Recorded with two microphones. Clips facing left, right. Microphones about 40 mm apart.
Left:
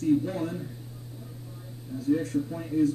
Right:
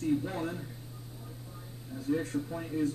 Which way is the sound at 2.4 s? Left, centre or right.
Centre.